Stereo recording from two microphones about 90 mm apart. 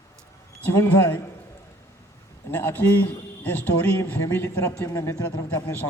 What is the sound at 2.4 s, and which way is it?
Speech, 25° left (ahead or behind).